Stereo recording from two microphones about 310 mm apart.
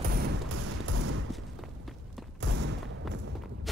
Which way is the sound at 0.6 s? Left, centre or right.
Right.